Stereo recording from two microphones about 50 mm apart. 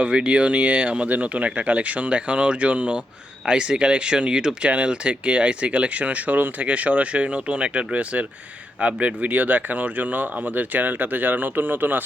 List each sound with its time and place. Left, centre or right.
0.0 s speech: right